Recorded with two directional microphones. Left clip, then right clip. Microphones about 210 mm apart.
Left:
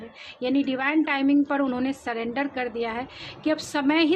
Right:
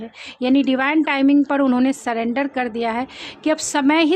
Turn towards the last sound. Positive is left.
turn(degrees=-40)  # may be behind; listen again after turning